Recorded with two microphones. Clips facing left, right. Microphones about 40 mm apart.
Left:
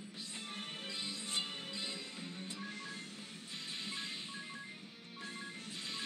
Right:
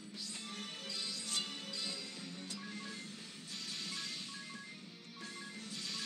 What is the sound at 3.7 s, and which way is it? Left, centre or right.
Music, left.